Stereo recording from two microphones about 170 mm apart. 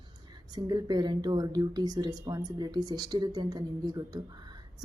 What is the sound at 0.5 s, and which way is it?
A woman's voice, 25° right (ahead or behind).